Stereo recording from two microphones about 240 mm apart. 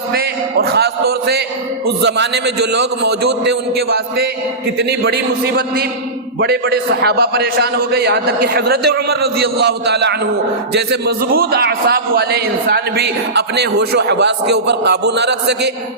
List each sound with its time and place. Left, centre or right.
0.1 s a man's voice: right